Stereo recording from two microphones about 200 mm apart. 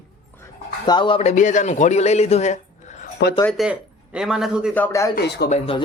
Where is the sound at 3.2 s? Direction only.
60° left (ahead or behind).